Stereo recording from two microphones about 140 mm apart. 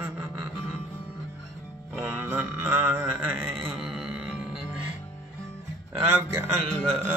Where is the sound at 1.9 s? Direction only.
15° right (ahead or behind).